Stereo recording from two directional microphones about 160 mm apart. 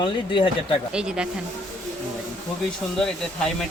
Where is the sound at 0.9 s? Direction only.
5° right (ahead or behind).